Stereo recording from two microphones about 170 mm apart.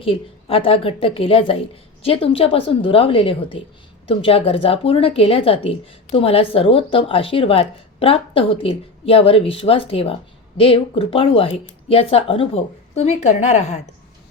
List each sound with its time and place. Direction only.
0.0 s a woman's voice: 35° left (ahead or behind)